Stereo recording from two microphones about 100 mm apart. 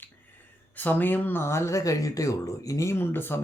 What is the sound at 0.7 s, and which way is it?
Speech, 20° left (ahead or behind).